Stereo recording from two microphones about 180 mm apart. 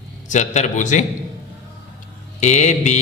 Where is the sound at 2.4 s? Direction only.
40° left (ahead or behind).